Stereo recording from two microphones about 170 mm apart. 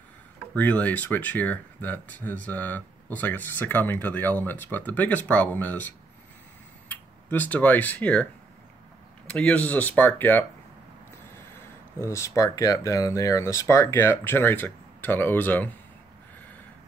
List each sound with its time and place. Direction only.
0.6 s speech: 10° left (ahead or behind)
6.9 s speech: 10° left (ahead or behind)
9.3 s speech: 10° left (ahead or behind)